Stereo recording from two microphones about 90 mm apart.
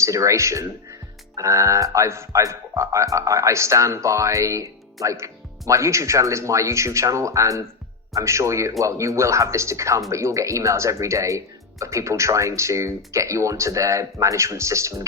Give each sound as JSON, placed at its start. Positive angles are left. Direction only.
{"t": 0.0, "sound": "speech", "side_deg": -35}